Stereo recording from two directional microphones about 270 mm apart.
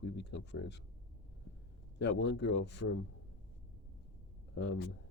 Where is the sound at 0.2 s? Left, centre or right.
Left.